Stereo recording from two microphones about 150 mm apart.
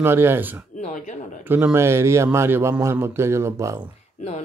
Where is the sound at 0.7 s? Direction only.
50° left (ahead or behind).